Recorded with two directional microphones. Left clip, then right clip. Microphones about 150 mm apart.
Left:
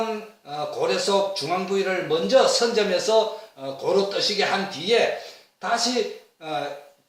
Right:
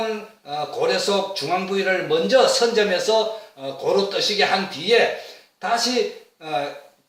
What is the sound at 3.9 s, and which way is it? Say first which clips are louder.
Speech: right 2 dB; 15° left (ahead or behind).